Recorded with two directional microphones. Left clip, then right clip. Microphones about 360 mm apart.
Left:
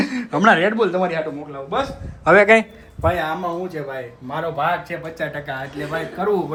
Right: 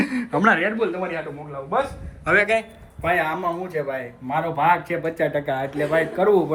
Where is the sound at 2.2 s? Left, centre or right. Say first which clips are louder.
Left 6 dB; centre.